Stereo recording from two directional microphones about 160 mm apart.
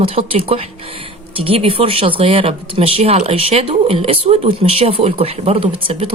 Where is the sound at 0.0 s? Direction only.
35° right (ahead or behind).